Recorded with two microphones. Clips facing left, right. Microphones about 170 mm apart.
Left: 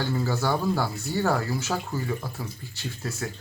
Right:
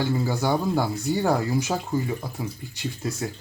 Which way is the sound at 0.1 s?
15° right (ahead or behind).